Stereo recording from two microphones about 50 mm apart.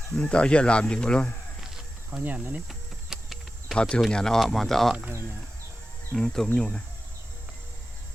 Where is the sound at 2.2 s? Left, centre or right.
Right.